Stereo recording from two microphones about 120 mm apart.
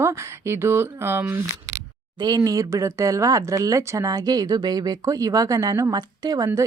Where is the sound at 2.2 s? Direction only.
35° right (ahead or behind).